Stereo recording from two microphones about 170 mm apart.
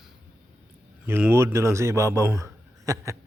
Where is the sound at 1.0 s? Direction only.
15° right (ahead or behind).